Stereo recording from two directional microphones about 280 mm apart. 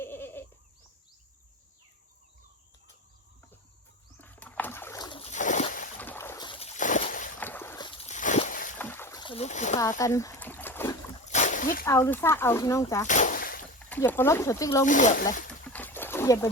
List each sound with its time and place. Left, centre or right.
0.0 s goat: centre
4.2 s boat: centre; by 5.9 s left
6.0 s boat: centre; by 7.3 s left
7.3 s boat: centre; by 8.7 s left
8.8 s boat: centre; by 9.7 s left
10.0 s trickle: centre
11.3 s splash: left
11.9 s speech: centre
13.1 s a sound: left
13.9 s speech: centre
14.8 s speech: left
15.7 s a sound: centre